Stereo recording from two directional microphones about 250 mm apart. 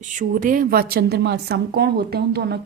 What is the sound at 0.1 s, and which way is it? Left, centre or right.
A woman's voice, right.